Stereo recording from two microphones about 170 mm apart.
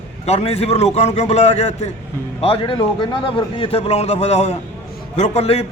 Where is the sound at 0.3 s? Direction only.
35° left (ahead or behind).